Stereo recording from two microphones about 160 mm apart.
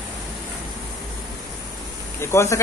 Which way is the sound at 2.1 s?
15° left (ahead or behind).